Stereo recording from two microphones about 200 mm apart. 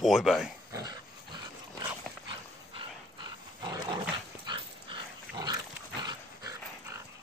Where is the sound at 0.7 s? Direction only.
20° right (ahead or behind).